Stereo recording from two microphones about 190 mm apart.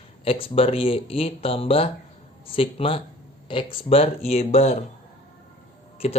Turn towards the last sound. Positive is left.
turn(degrees=35)  # may be behind; listen again after turning